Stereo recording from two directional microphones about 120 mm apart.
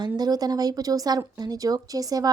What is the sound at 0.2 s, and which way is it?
Speech, 35° right (ahead or behind).